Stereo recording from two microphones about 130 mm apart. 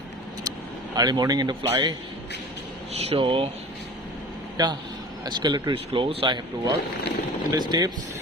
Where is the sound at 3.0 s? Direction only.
45° right (ahead or behind).